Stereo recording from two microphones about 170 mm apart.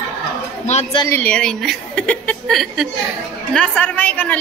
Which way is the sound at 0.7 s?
45° left (ahead or behind).